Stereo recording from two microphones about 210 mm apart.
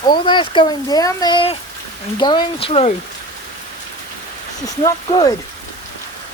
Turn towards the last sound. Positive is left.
turn(degrees=20)  # may be behind; listen again after turning